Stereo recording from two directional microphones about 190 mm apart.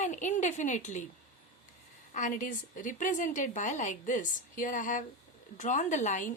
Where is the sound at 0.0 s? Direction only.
40° left (ahead or behind).